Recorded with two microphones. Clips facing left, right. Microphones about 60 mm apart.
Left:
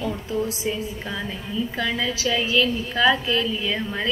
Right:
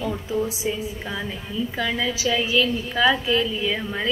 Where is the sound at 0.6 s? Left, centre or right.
Centre.